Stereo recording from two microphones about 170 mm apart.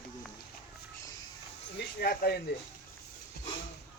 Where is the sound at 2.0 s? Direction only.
65° left (ahead or behind).